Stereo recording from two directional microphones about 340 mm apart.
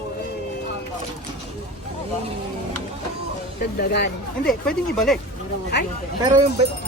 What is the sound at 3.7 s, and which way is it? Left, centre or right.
Speech, left.